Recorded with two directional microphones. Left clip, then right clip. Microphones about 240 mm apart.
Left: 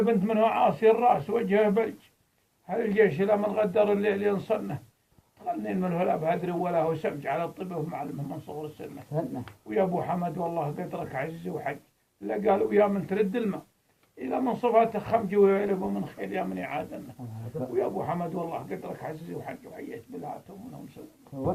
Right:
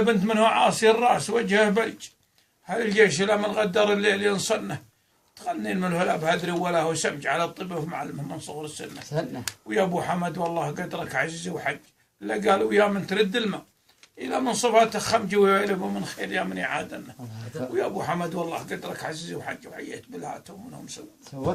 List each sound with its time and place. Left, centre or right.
0.0 s a man's voice: centre
9.1 s speech: right
9.6 s a man's voice: centre